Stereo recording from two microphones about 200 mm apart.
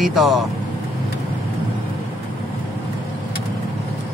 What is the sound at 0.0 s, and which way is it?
Speech, centre (ahead or behind).